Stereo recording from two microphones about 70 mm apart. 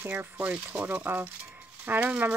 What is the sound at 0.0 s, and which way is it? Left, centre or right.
Speech, right.